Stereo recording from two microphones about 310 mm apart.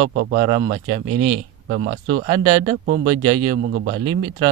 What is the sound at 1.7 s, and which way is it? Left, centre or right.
Speech, right.